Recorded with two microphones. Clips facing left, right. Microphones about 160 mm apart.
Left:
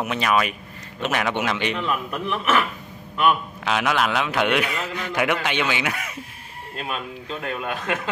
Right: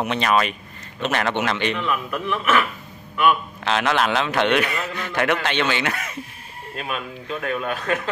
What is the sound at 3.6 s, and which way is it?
A man's voice, 5° left (ahead or behind).